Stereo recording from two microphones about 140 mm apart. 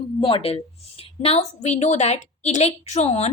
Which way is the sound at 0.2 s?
40° left (ahead or behind).